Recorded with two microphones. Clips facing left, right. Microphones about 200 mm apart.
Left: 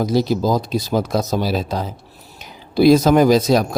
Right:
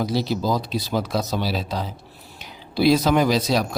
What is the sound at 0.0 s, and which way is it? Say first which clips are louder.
Speech: left 5 dB; 45° left (ahead or behind).